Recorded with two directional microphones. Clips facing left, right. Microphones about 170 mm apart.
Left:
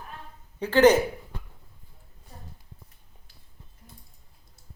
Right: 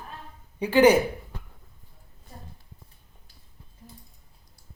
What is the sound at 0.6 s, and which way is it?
Speech, 10° right (ahead or behind).